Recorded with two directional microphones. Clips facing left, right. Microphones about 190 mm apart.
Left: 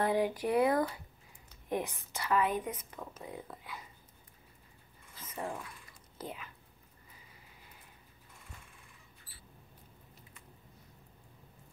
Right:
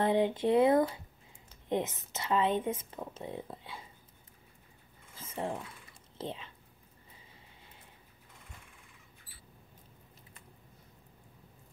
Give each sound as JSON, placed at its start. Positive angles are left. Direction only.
{"t": 0.0, "sound": "a woman's voice", "side_deg": -25}
{"t": 5.1, "sound": "whispering", "side_deg": -25}